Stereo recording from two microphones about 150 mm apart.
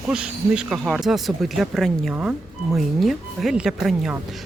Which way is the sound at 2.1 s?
10° right (ahead or behind).